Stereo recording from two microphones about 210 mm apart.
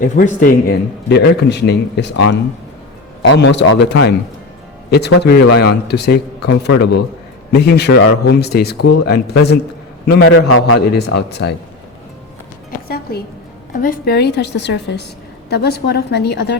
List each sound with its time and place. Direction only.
0.0 s speech: 40° left (ahead or behind)
1.0 s a man's voice: 55° left (ahead or behind)
12.9 s a sound: 45° left (ahead or behind)
13.7 s a man's voice: 40° left (ahead or behind)